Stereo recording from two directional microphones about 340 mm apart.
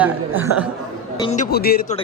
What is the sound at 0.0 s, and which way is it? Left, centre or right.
Speech, centre.